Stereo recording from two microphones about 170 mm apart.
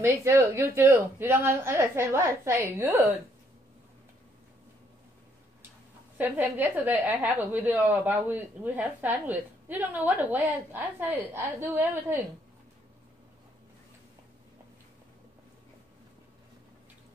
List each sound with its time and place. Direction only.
0.0 s a woman's voice: 15° right (ahead or behind)
6.1 s a woman's voice: 10° right (ahead or behind)